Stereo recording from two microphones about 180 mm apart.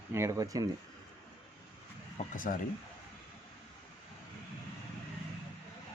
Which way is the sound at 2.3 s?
50° left (ahead or behind).